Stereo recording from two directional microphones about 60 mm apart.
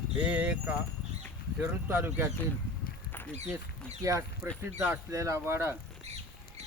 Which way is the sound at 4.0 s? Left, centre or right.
Right.